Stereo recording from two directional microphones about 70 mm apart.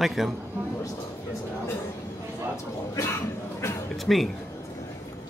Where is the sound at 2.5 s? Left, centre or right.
Left.